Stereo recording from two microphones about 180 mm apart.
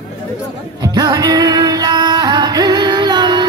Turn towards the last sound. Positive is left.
turn(degrees=-25)  # may be behind; listen again after turning